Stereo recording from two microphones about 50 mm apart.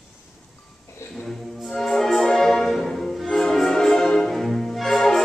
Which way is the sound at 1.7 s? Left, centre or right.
Centre.